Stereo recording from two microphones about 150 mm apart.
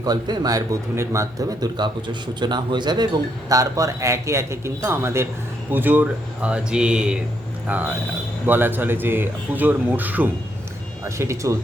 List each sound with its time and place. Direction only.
0.0 s speech: 25° right (ahead or behind)